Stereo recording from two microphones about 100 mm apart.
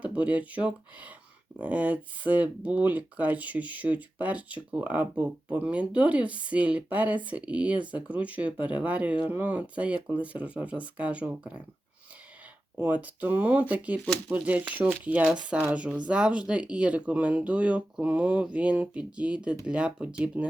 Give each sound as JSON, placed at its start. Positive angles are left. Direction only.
{"t": 0.0, "sound": "speech", "side_deg": -15}
{"t": 12.7, "sound": "speech", "side_deg": -15}